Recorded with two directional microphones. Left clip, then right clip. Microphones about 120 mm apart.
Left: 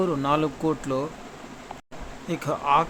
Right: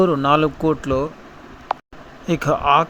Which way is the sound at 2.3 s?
45° right (ahead or behind).